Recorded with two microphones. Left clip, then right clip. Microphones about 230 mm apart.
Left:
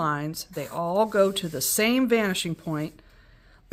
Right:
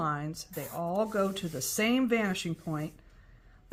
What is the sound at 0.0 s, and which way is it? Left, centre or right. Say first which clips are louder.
Speech: left 6 dB; left.